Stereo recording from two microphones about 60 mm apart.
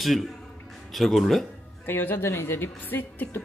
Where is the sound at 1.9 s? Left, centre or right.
Left.